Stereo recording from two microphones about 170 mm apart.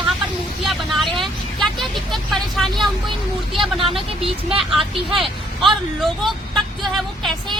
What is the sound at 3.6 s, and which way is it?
Speech, 30° right (ahead or behind).